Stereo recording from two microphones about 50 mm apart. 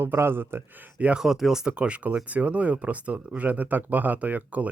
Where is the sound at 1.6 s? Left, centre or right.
Right.